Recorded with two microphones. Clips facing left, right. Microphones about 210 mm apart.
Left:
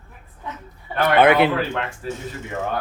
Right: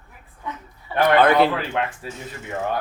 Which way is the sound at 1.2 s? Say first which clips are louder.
Left 3 dB; 20° left (ahead or behind).